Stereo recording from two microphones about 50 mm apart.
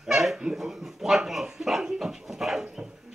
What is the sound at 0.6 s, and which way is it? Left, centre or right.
Dog, centre.